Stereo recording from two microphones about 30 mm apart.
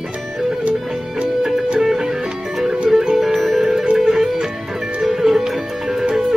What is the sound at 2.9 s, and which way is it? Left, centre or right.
Music, centre.